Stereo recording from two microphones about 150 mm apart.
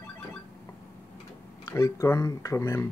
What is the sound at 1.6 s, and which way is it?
Speech, 20° left (ahead or behind).